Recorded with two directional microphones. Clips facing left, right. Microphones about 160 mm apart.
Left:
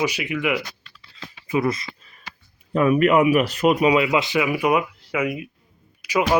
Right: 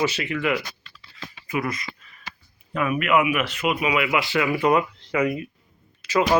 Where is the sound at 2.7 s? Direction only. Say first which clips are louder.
Left 5 dB; 35° left (ahead or behind).